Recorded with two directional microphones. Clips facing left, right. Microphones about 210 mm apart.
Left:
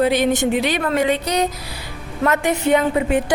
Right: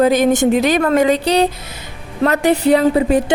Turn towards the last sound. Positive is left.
turn(degrees=-35)  # may be behind; listen again after turning